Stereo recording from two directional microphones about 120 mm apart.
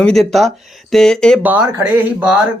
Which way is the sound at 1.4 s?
15° right (ahead or behind).